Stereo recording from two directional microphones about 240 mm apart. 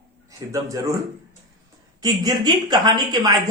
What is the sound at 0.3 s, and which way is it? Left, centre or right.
Speech, centre.